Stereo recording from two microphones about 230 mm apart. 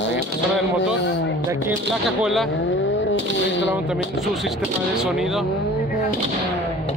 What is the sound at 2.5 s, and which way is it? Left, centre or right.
Vehicle, left.